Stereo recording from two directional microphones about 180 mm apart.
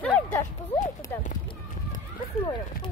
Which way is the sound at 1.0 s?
15° left (ahead or behind).